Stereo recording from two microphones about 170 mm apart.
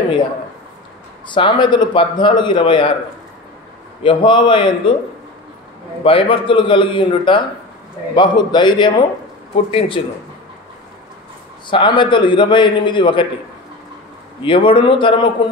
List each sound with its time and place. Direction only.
1.3 s a man's voice: 25° left (ahead or behind)
4.0 s a man's voice: 30° left (ahead or behind)
6.0 s a man's voice: 30° left (ahead or behind)
11.7 s a man's voice: 30° left (ahead or behind)
14.4 s a man's voice: 30° left (ahead or behind)